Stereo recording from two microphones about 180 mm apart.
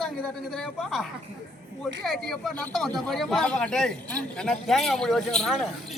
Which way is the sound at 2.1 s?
Centre (ahead or behind).